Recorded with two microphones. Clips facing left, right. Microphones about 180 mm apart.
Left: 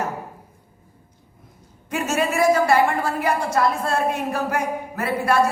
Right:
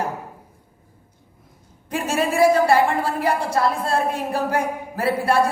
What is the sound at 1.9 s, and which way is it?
A woman's voice, 30° right (ahead or behind).